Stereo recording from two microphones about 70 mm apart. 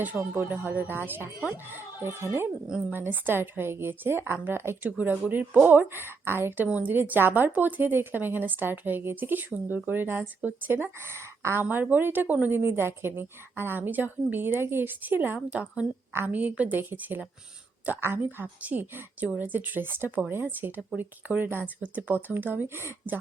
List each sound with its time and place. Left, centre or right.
0.2 s a woman's voice: right
4.9 s a woman's voice: right
6.7 s a woman's voice: right
11.6 s a woman's voice: right
16.1 s a woman's voice: right